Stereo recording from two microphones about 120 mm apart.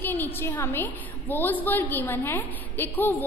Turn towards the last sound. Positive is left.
turn(degrees=15)  # may be behind; listen again after turning